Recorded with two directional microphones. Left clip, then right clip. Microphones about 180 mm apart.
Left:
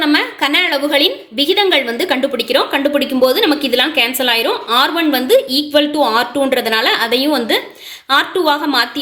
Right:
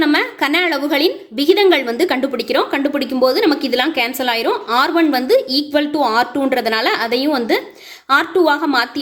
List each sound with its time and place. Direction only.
0.0 s a woman's voice: 40° right (ahead or behind)